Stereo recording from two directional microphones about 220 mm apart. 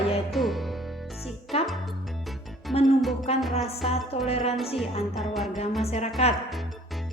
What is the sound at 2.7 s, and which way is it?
Music, 30° left (ahead or behind).